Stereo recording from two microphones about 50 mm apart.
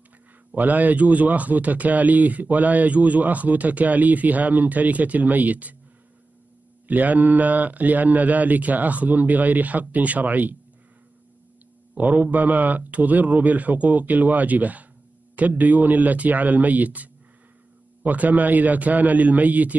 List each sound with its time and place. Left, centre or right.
0.6 s a man's voice: right
6.9 s a man's voice: right
11.9 s a man's voice: right